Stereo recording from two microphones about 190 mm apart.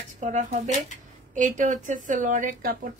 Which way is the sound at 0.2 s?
40° right (ahead or behind).